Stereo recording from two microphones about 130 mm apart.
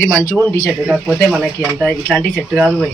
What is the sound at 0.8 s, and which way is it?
Speech, centre (ahead or behind).